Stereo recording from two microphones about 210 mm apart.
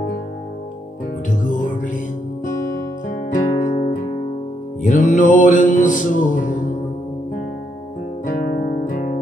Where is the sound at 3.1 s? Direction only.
40° left (ahead or behind).